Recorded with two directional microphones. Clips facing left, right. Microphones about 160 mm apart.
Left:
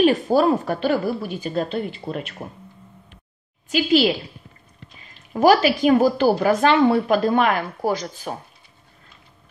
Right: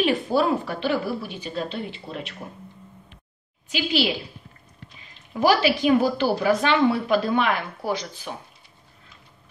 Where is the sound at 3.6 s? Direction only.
45° left (ahead or behind).